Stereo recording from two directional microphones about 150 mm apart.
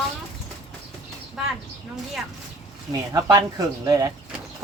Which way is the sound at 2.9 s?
25° right (ahead or behind).